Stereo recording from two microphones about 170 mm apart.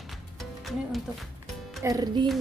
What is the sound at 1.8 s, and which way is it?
Music, 20° right (ahead or behind).